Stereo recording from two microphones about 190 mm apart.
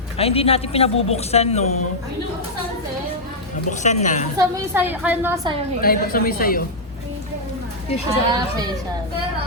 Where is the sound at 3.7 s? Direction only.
40° left (ahead or behind).